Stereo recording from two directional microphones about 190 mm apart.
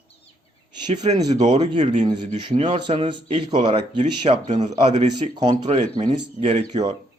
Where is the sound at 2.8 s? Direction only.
25° right (ahead or behind).